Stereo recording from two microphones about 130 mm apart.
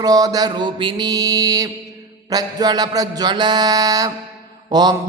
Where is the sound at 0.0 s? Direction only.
30° right (ahead or behind).